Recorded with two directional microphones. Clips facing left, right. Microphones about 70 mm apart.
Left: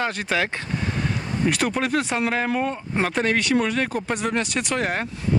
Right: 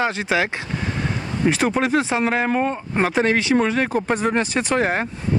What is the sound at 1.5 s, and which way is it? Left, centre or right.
Speech, right.